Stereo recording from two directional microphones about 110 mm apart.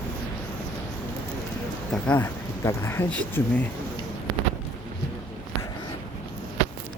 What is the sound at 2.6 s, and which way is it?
Speech, 25° left (ahead or behind).